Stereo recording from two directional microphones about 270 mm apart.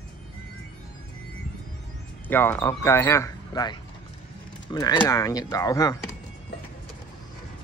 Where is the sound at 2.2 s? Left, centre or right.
Centre.